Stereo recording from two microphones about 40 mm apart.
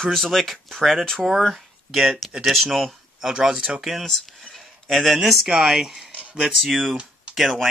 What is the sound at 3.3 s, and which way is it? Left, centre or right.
Speech, centre.